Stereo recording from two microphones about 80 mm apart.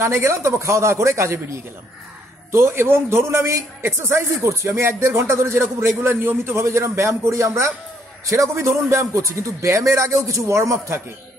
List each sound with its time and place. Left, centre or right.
0.0 s a man's voice: right